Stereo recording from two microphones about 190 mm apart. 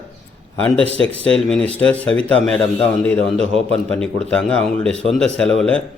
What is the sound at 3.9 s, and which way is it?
A man's voice, 5° left (ahead or behind).